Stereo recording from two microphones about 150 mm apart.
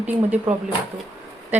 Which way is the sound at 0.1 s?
10° right (ahead or behind).